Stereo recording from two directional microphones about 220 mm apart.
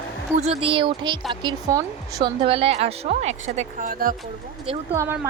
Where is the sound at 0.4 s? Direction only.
25° right (ahead or behind).